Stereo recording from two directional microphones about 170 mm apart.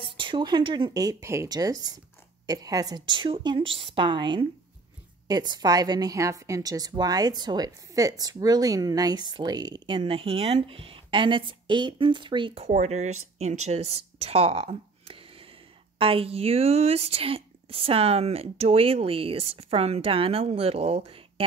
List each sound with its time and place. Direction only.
0.0 s a woman's voice: 30° right (ahead or behind)